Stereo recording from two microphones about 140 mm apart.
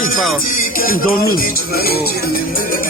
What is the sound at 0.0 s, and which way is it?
Speech, 80° left.